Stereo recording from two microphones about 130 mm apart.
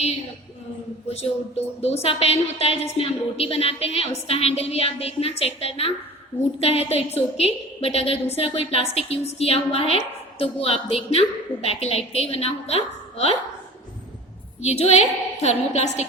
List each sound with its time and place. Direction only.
1.1 s a woman's voice: 55° left (ahead or behind)
14.6 s a woman's voice: 55° left (ahead or behind)